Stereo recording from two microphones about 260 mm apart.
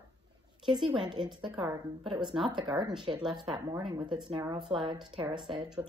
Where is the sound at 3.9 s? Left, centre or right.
Centre.